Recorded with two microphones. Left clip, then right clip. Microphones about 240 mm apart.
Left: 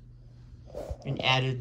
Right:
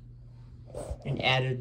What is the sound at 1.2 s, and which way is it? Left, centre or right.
Speech, centre.